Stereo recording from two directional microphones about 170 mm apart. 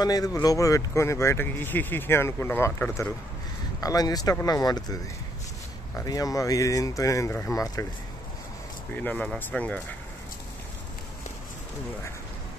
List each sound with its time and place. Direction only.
0.0 s speech: 20° left (ahead or behind)
5.9 s speech: 20° left (ahead or behind)
8.9 s speech: 10° left (ahead or behind)